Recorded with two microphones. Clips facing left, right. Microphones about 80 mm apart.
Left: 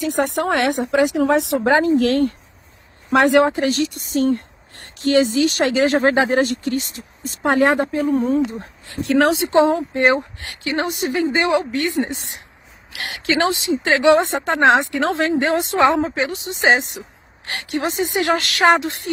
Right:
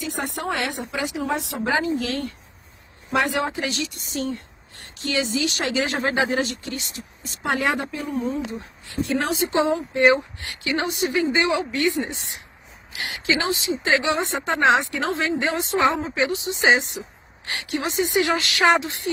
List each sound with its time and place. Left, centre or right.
0.0 s speech: left
3.1 s speech: left
9.5 s speech: left
14.0 s speech: left
16.4 s speech: left